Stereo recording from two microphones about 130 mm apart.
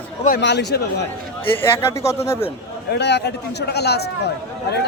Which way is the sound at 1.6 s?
20° left (ahead or behind).